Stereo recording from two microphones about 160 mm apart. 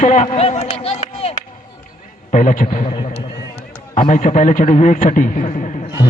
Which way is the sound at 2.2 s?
50° left (ahead or behind).